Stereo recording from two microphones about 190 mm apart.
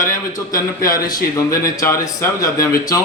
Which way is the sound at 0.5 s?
50° left (ahead or behind).